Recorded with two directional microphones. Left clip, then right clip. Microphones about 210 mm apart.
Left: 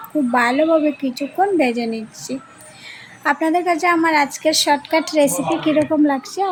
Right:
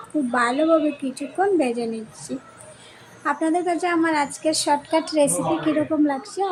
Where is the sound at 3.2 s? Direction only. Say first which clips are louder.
Left 5 dB; 10° left (ahead or behind).